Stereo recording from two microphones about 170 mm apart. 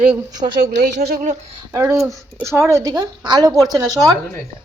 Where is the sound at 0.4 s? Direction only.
35° right (ahead or behind).